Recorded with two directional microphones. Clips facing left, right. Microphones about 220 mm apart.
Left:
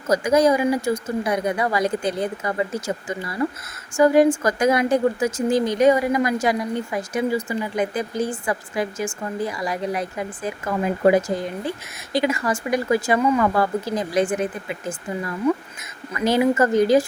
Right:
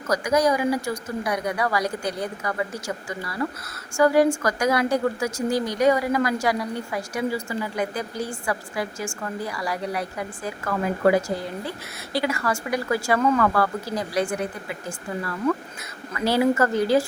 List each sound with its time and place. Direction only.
0.1 s a woman's voice: 25° left (ahead or behind)